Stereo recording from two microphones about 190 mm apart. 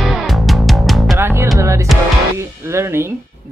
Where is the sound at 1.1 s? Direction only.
15° right (ahead or behind).